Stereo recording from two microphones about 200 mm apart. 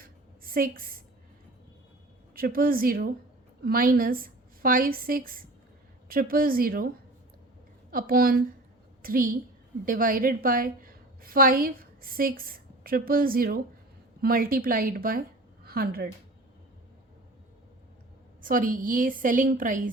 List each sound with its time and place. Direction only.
0.0 s a sound: 45° right (ahead or behind)
2.3 s a woman's voice: 45° right (ahead or behind)
18.4 s a woman's voice: 45° right (ahead or behind)